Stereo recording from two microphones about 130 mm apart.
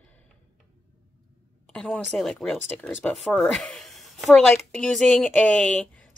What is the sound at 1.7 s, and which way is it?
Speech, 5° left (ahead or behind).